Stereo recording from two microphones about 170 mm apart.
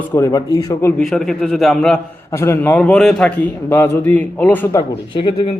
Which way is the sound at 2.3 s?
15° left (ahead or behind).